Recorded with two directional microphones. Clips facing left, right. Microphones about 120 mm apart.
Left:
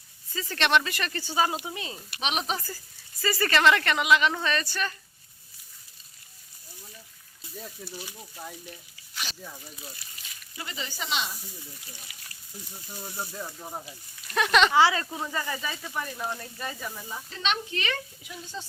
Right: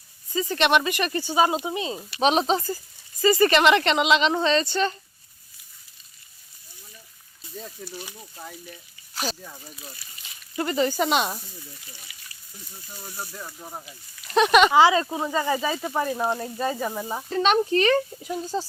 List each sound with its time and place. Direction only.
0.3 s speech: 15° right (ahead or behind)
2.2 s speech: 35° right (ahead or behind)
7.5 s speech: centre (ahead or behind)
9.2 s snake: 40° right (ahead or behind)
10.5 s speech: 50° right (ahead or behind)
13.3 s speech: 5° left (ahead or behind)
14.3 s speech: 20° right (ahead or behind)
15.4 s speech: 35° right (ahead or behind)
16.4 s speech: 30° right (ahead or behind)
16.7 s speech: 55° right (ahead or behind)